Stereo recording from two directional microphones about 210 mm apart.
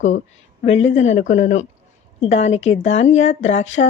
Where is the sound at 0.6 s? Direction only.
30° left (ahead or behind).